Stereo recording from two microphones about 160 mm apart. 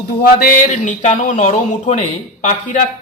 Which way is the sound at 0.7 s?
50° left (ahead or behind).